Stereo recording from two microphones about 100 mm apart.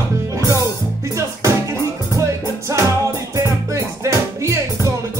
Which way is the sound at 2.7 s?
30° right (ahead or behind).